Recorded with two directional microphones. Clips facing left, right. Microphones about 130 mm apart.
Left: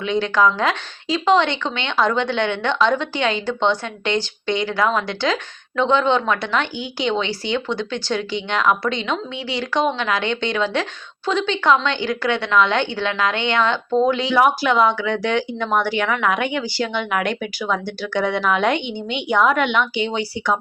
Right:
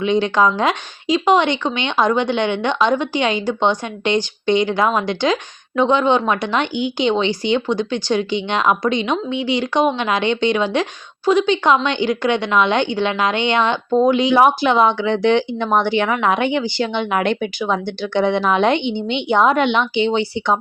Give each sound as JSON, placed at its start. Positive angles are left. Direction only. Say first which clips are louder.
{"t": 0.0, "sound": "a woman's voice", "louder": "right 2 dB", "side_deg": -20}